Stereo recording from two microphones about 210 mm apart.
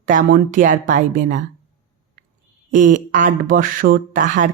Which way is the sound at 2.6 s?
40° right (ahead or behind).